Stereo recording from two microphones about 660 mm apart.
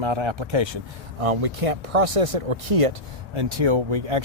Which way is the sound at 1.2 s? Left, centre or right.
Right.